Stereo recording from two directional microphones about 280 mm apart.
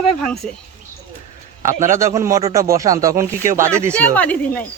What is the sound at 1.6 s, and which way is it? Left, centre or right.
Speech, centre.